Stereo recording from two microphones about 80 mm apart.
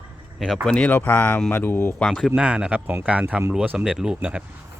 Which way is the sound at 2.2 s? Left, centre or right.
Centre.